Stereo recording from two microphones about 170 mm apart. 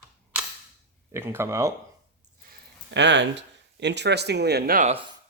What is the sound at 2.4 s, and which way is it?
Speech, 75° right (ahead or behind).